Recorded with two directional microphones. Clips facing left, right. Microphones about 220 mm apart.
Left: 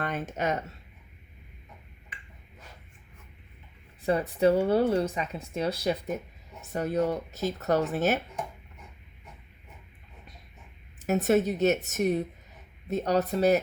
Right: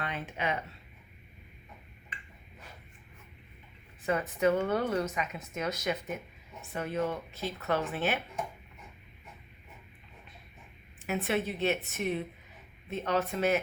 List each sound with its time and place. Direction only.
0.0 s speech: 45° left (ahead or behind)
4.0 s speech: 35° left (ahead or behind)
11.0 s a woman's voice: 40° left (ahead or behind)